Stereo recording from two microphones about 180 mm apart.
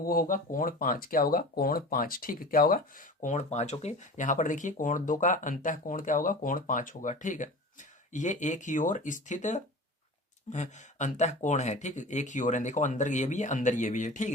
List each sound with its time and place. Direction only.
0.0 s speech: 50° left (ahead or behind)